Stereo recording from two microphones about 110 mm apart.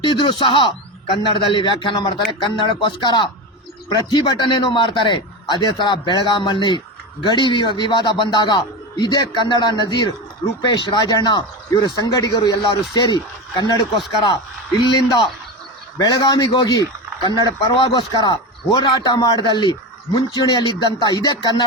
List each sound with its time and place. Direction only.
0.0 s a man's voice: 50° left (ahead or behind)
14.8 s a man's voice: 45° left (ahead or behind)